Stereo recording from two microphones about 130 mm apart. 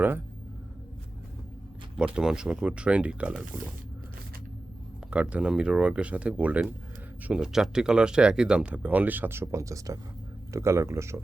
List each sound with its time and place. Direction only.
2.0 s speech: 5° right (ahead or behind)
5.1 s speech: 10° right (ahead or behind)